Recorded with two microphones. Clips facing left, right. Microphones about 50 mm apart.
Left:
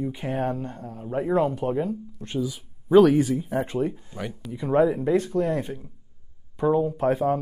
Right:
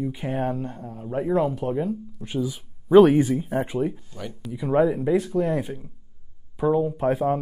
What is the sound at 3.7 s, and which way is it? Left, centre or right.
Speech, centre.